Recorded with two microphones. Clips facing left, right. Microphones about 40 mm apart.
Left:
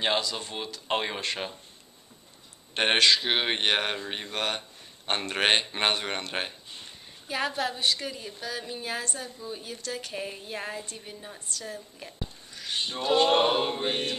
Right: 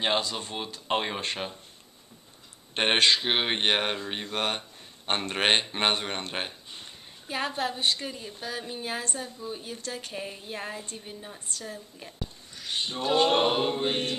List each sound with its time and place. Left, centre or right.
0.4 s a woman's voice: centre
2.7 s a woman's voice: centre
6.3 s speech: centre
7.2 s a woman's voice: centre
10.1 s speech: centre